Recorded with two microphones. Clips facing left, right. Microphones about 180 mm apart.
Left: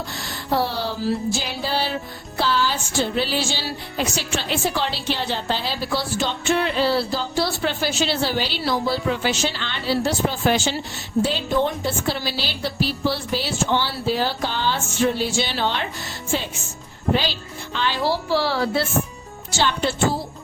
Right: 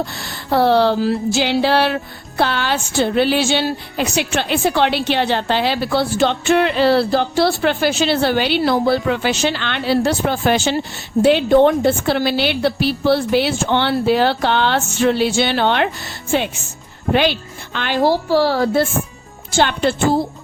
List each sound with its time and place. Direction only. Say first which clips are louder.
0.5 s music: right 10 dB; 65° right (ahead or behind)
2.4 s a woman's voice: right 3 dB; 65° right (ahead or behind)
17.1 s a woman's voice: right 6 dB; 65° right (ahead or behind)